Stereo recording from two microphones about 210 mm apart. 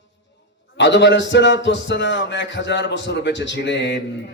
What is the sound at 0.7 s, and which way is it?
Speech, 55° left (ahead or behind).